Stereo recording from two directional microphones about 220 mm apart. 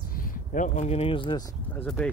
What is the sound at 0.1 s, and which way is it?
Speech, 40° left (ahead or behind).